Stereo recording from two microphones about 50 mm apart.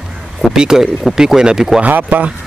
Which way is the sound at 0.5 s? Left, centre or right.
Centre.